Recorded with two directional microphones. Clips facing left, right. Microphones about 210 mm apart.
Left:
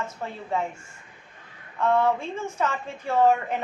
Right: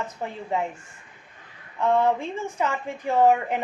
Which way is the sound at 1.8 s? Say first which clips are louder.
Right 1 dB; 15° right (ahead or behind).